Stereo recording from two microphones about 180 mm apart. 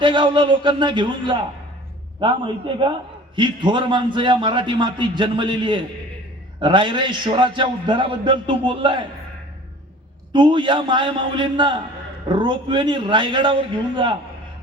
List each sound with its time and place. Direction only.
0.0 s a man's voice: 25° right (ahead or behind)
10.3 s a man's voice: 25° right (ahead or behind)